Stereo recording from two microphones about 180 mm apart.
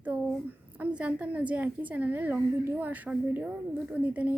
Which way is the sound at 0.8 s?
5° right (ahead or behind).